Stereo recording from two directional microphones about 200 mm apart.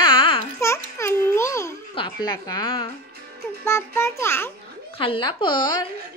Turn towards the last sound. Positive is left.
turn(degrees=20)  # may be behind; listen again after turning